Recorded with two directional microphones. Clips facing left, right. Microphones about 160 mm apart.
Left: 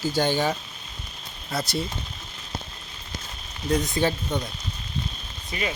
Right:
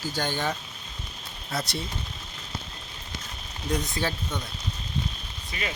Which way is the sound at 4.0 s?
20° left (ahead or behind).